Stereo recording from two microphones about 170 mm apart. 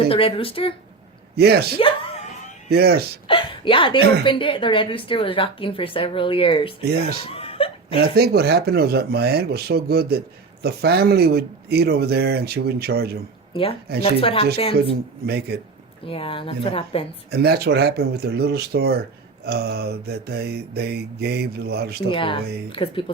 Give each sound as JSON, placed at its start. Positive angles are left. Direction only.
{"t": 0.1, "sound": "a woman's voice", "side_deg": 30}
{"t": 1.4, "sound": "speech", "side_deg": -70}
{"t": 1.8, "sound": "music", "side_deg": 35}
{"t": 2.6, "sound": "speech", "side_deg": -70}
{"t": 3.2, "sound": "a sound", "side_deg": 30}
{"t": 4.2, "sound": "a woman's voice", "side_deg": 30}
{"t": 6.8, "sound": "speech", "side_deg": -70}
{"t": 7.3, "sound": "chuckle", "side_deg": 35}
{"t": 8.0, "sound": "speech", "side_deg": -65}
{"t": 13.5, "sound": "a woman's voice", "side_deg": 35}
{"t": 15.3, "sound": "speech", "side_deg": -70}
{"t": 16.0, "sound": "a woman's voice", "side_deg": 30}
{"t": 17.3, "sound": "speech", "side_deg": -70}
{"t": 22.1, "sound": "a woman's voice", "side_deg": 30}